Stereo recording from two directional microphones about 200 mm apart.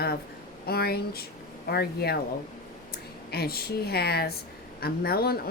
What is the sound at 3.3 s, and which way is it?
Speech, 50° left (ahead or behind).